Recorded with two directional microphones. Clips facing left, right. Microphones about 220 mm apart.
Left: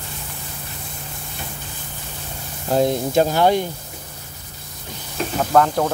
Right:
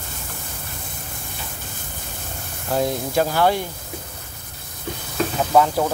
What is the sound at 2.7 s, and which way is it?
Speech, 25° left (ahead or behind).